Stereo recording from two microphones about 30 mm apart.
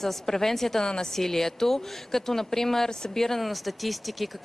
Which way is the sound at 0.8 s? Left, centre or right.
Left.